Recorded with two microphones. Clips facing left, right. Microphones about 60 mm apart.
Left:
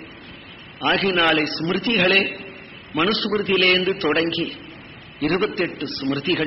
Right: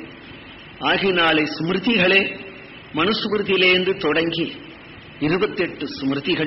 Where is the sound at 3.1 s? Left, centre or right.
Centre.